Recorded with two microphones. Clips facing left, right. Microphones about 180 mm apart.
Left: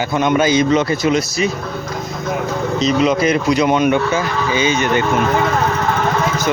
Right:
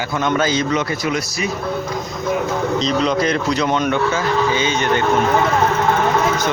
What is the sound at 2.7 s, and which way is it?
Speech, 5° left (ahead or behind).